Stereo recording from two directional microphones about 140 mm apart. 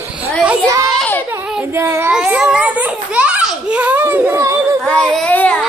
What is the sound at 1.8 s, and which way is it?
Child singing, 20° right (ahead or behind).